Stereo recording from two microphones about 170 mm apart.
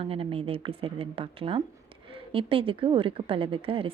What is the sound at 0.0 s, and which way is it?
A woman's voice, 35° right (ahead or behind).